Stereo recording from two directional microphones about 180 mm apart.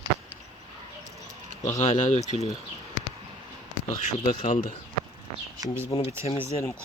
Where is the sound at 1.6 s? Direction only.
40° left (ahead or behind).